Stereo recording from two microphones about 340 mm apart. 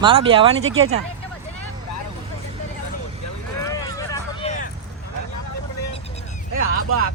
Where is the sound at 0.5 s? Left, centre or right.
Right.